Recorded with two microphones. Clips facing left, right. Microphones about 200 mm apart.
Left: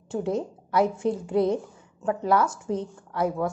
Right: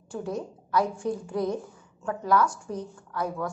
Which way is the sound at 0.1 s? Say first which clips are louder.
Left 5 dB; 25° left (ahead or behind).